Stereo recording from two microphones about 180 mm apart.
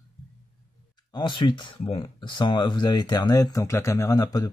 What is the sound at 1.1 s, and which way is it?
Speech, 25° left (ahead or behind).